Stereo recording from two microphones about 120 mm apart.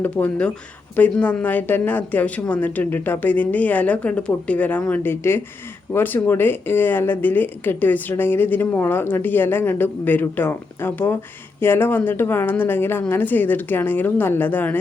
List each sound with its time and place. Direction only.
0.0 s speech: 10° left (ahead or behind)